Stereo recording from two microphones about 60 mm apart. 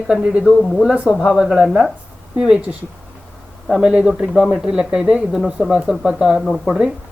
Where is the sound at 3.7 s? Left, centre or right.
Centre.